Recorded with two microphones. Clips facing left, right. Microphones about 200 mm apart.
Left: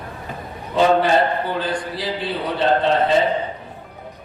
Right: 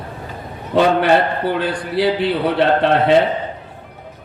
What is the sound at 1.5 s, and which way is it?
A man's voice, 65° right (ahead or behind).